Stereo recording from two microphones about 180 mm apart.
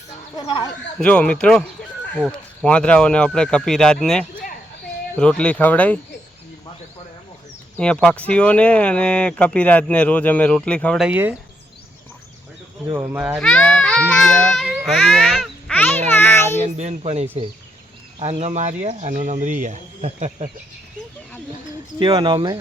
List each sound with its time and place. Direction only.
0.3 s speech: 25° left (ahead or behind)
0.9 s speech: 5° left (ahead or behind)
7.8 s speech: 5° left (ahead or behind)
12.9 s speech: 10° right (ahead or behind)
13.4 s speech: 5° left (ahead or behind)
16.0 s a sound: 10° left (ahead or behind)
16.6 s speech: 40° right (ahead or behind)
21.9 s speech: 30° right (ahead or behind)